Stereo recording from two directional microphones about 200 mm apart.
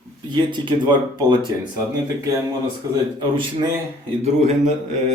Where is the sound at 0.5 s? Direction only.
25° right (ahead or behind).